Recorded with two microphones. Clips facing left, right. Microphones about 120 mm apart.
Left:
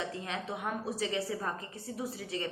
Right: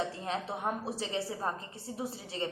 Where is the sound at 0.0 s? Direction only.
35° right (ahead or behind).